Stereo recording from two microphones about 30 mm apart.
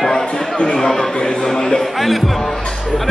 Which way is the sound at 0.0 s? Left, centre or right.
Left.